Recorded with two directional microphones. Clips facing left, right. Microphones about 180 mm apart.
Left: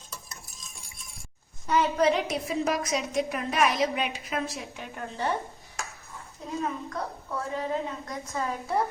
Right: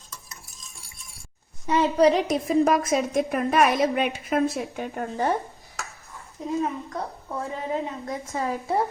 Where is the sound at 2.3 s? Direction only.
50° right (ahead or behind).